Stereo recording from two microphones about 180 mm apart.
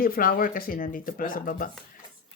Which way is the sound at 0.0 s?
55° left (ahead or behind).